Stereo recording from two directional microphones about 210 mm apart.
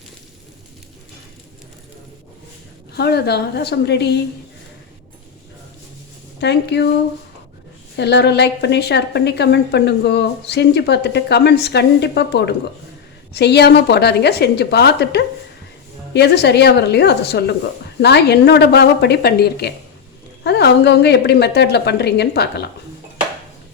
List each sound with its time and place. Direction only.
2.9 s a woman's voice: 50° left (ahead or behind)
6.4 s a woman's voice: 55° left (ahead or behind)
7.9 s a woman's voice: 55° left (ahead or behind)